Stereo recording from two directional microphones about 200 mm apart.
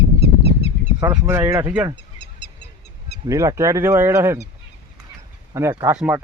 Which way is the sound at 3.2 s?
15° right (ahead or behind).